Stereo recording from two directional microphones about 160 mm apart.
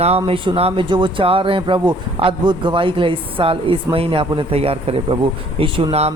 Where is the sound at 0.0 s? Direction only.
40° right (ahead or behind).